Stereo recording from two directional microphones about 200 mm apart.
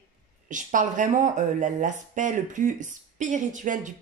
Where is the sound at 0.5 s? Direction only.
40° right (ahead or behind).